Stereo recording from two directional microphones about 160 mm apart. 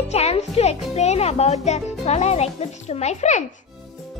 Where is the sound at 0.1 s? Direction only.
40° left (ahead or behind).